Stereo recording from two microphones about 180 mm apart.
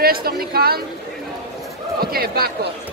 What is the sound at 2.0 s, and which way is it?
Speech, 55° right (ahead or behind).